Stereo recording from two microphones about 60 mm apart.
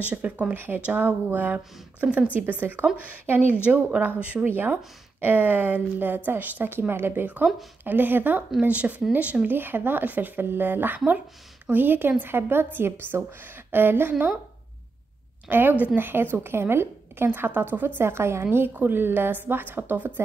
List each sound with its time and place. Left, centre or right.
0.0 s a woman's voice: right
3.6 s speech: right
4.5 s a woman's voice: right
13.7 s a woman's voice: right
15.8 s a woman's voice: right